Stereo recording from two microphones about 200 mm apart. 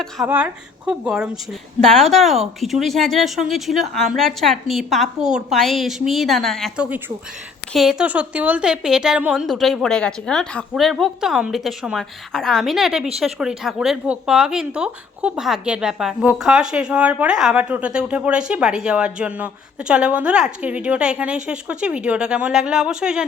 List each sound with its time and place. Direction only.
0.3 s speech: 10° right (ahead or behind)